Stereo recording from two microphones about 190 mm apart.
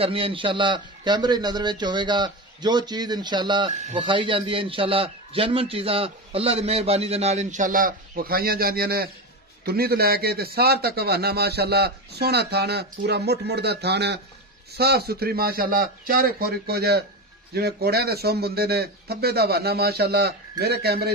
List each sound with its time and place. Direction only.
0.0 s a man's voice: 30° right (ahead or behind)
3.7 s a man's voice: 35° right (ahead or behind)
4.0 s a man's voice: 25° right (ahead or behind); by 21.1 s 55° right (ahead or behind)